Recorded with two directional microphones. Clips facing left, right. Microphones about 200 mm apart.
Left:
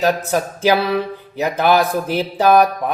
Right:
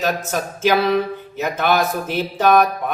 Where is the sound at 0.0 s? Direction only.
35° left (ahead or behind).